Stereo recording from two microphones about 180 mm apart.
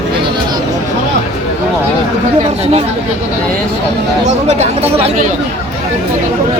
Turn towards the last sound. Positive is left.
turn(degrees=-40)  # may be behind; listen again after turning